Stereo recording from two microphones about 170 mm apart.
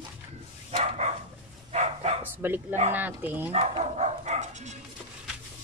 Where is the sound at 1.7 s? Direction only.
40° right (ahead or behind).